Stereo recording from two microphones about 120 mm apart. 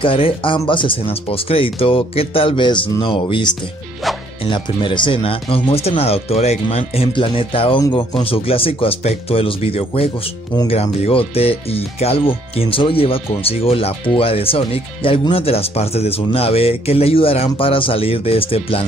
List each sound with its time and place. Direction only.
0.0 s speech: 45° left (ahead or behind)
7.1 s speech: 45° left (ahead or behind)